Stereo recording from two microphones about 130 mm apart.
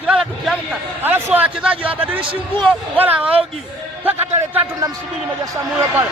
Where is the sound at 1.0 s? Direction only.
15° right (ahead or behind).